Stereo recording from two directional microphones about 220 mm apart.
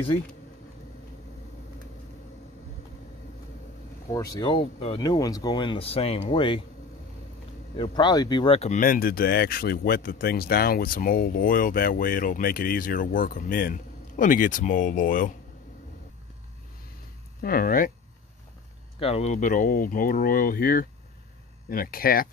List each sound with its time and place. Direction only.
4.1 s speech: 15° left (ahead or behind)
7.7 s speech: 20° left (ahead or behind); by 15.3 s 40° left (ahead or behind)
17.4 s speech: 40° left (ahead or behind)
18.9 s speech: 25° left (ahead or behind)